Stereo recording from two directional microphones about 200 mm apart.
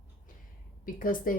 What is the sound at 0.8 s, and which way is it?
Speech, 45° left (ahead or behind).